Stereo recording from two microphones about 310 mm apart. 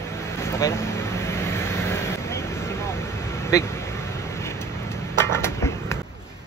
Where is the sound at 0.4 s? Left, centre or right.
Centre.